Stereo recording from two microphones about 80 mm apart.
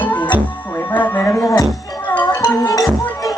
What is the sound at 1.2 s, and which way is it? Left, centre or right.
Music, left.